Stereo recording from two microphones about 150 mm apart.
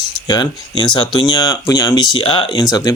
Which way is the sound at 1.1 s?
30° left (ahead or behind).